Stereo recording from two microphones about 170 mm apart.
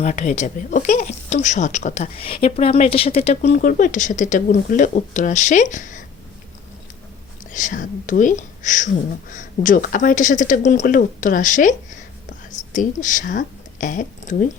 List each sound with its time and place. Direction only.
0.0 s speech: 45° left (ahead or behind)
3.6 s speech: 55° left (ahead or behind)
7.5 s speech: 50° left (ahead or behind)